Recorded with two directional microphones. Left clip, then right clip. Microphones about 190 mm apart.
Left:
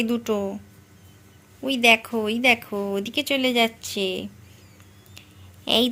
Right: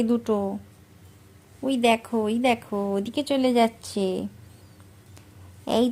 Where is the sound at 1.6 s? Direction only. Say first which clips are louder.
Left 4 dB; 20° right (ahead or behind).